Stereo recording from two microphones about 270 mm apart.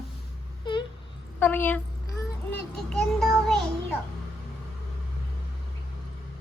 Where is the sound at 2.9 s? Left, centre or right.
Centre.